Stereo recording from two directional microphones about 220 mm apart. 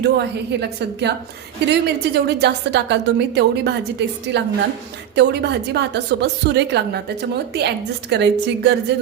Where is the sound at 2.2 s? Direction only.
50° right (ahead or behind).